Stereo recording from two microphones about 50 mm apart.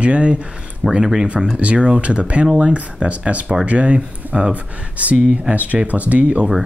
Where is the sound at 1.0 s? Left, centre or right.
Centre.